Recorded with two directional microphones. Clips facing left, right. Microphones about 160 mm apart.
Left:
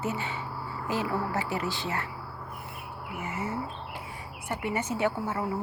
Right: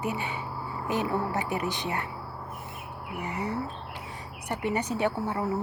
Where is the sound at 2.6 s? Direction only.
20° right (ahead or behind).